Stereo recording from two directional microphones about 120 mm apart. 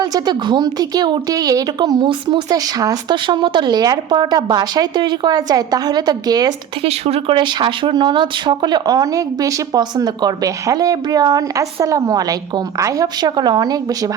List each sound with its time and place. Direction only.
0.0 s speech: 35° right (ahead or behind)
6.8 s speech: 60° right (ahead or behind)
7.3 s speech: 40° right (ahead or behind)